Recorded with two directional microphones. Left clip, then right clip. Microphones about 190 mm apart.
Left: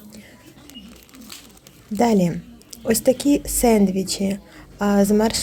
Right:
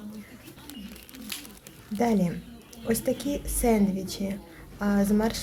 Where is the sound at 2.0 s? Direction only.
30° left (ahead or behind).